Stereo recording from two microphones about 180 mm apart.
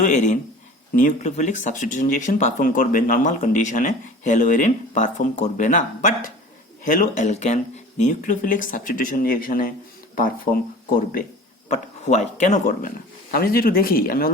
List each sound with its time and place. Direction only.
0.0 s speech: 45° left (ahead or behind)
11.7 s speech: 40° left (ahead or behind)